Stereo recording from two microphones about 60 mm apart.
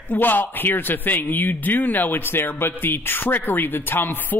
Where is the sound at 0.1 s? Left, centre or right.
Left.